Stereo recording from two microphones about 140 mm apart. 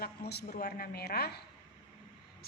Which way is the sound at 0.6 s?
90° left.